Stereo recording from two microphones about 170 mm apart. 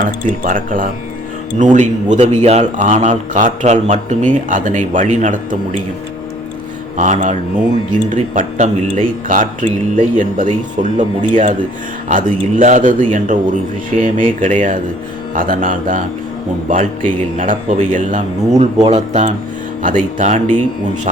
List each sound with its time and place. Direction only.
0.0 s a man's voice: 50° right (ahead or behind)
6.9 s a man's voice: 45° right (ahead or behind)